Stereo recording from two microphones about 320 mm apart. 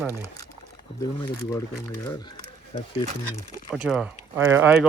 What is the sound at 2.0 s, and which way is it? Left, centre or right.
Speech, centre.